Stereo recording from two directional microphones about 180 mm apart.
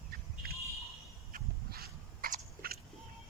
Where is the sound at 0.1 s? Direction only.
55° right (ahead or behind).